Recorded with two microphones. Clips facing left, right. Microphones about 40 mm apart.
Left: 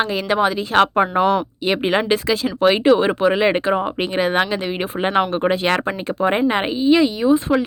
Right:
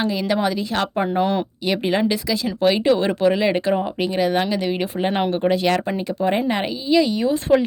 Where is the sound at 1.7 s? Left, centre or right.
Left.